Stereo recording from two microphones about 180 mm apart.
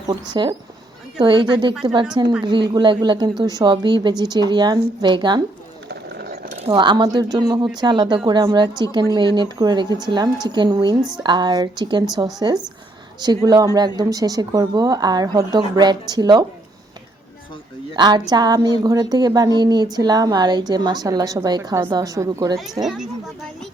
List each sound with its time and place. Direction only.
0.1 s a woman's voice: 25° right (ahead or behind)
5.9 s a sound: 65° right (ahead or behind)
6.7 s a woman's voice: 25° right (ahead or behind)
17.9 s a woman's voice: 25° right (ahead or behind)
22.8 s speech: centre (ahead or behind)